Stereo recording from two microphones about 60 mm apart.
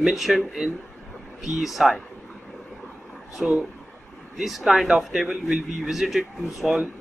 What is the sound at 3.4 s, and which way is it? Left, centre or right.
A man's voice, centre.